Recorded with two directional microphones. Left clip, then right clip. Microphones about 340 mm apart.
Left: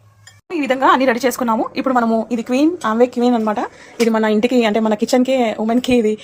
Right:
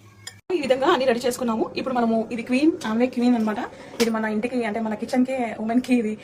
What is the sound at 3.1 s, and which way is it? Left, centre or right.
A woman's voice, centre.